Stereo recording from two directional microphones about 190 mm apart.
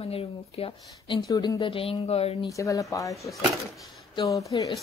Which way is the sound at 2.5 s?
15° left (ahead or behind).